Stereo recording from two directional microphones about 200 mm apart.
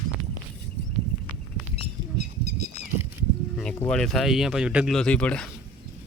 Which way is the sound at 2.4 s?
50° right (ahead or behind).